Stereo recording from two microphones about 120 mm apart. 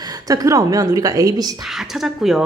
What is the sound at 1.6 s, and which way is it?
Speech, 5° right (ahead or behind).